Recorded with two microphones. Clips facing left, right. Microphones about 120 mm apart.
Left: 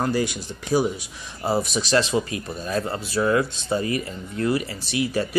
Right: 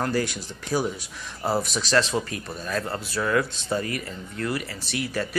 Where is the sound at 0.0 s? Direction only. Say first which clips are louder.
Left 2 dB; 20° left (ahead or behind).